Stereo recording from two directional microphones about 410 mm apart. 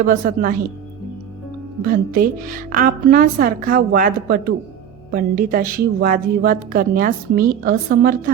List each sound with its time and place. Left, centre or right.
0.0 s a woman's voice: centre
1.8 s a woman's voice: right